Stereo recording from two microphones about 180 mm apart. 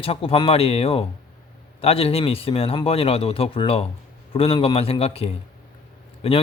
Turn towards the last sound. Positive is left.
turn(degrees=30)  # may be behind; listen again after turning